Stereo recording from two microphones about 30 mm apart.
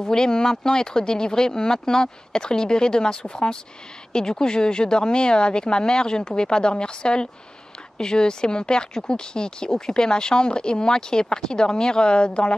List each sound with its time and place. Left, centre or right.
0.0 s speech: left